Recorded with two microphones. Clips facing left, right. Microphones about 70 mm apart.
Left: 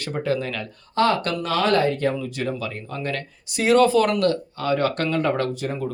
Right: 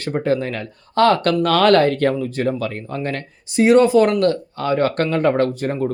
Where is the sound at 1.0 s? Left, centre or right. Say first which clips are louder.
Right 6 dB; right.